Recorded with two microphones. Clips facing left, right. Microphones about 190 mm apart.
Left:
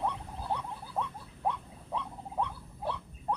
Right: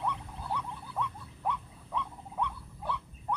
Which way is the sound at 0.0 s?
30° left (ahead or behind).